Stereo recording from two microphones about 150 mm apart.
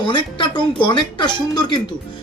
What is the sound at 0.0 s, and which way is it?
Speech, 30° left (ahead or behind).